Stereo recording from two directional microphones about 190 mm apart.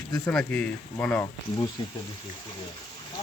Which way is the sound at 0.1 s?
5° left (ahead or behind).